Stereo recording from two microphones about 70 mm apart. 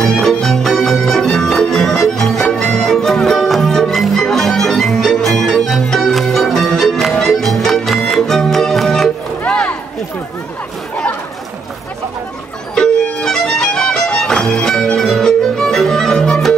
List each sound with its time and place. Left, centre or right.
0.0 s music: centre
9.5 s a sound: centre
12.7 s music: centre